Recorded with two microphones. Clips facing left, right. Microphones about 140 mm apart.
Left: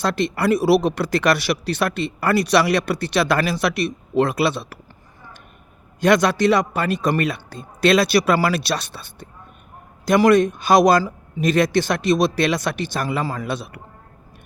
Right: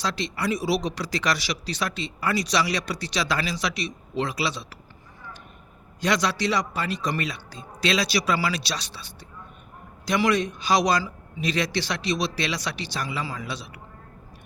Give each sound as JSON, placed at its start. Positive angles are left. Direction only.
{"t": 0.0, "sound": "speech", "side_deg": 55}
{"t": 6.0, "sound": "speech", "side_deg": 55}